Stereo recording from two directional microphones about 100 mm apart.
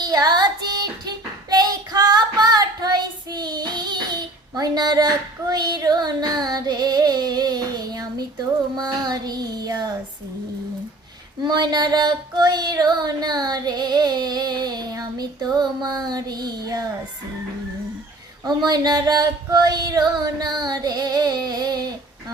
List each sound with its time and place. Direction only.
0.0 s child singing: 40° right (ahead or behind)
8.7 s music: 45° right (ahead or behind)
11.4 s child singing: 45° right (ahead or behind)
18.4 s music: 40° right (ahead or behind)